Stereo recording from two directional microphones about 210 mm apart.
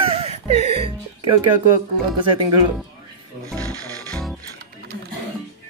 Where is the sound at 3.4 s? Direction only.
15° right (ahead or behind).